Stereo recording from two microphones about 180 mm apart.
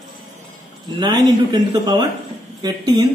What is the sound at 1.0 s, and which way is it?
A man's voice, 25° right (ahead or behind).